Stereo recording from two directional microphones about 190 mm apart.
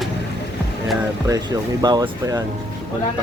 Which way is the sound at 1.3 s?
20° right (ahead or behind).